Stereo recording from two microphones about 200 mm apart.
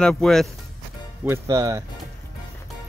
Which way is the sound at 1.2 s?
15° right (ahead or behind).